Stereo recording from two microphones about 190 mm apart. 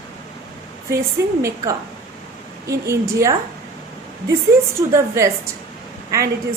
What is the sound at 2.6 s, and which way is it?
Speech, 15° right (ahead or behind).